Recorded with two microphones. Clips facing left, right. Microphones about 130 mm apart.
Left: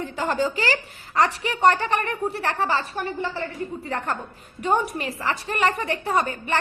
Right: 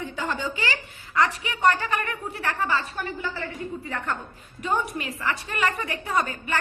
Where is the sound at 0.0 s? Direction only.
35° left (ahead or behind).